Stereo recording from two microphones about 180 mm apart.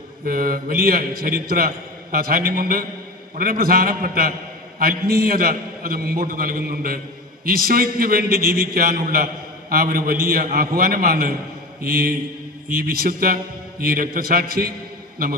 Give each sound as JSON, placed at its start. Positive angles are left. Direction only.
{"t": 0.3, "sound": "a man's voice", "side_deg": -55}